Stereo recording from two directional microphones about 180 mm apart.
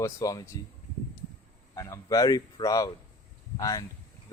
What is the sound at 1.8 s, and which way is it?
A man's voice, 15° left (ahead or behind).